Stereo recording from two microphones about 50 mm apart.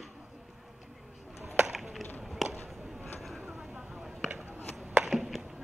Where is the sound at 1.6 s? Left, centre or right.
Centre.